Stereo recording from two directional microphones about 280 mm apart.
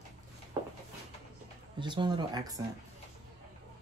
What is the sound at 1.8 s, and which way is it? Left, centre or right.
Speech, centre.